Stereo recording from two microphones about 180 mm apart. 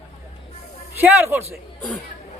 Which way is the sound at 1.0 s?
15° right (ahead or behind).